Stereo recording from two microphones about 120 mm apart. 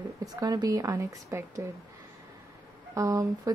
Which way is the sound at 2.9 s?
25° right (ahead or behind).